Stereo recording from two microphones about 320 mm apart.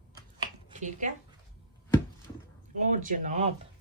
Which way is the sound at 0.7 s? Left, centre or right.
Right.